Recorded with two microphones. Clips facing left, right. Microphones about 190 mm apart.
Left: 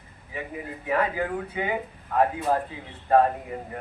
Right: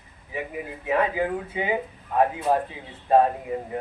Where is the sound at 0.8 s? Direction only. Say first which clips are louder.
Right 2 dB; 20° right (ahead or behind).